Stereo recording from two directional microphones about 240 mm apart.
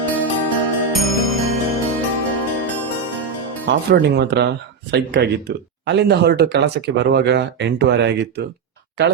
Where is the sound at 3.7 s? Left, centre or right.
Right.